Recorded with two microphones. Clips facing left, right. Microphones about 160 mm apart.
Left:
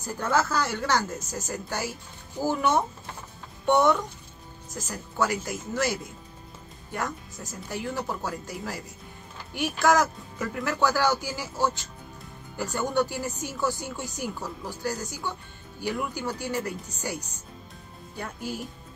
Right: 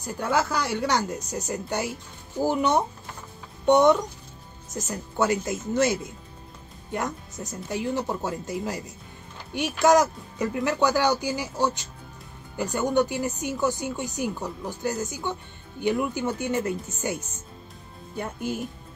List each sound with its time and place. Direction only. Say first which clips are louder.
0.0 s speech: right 1 dB; 15° right (ahead or behind)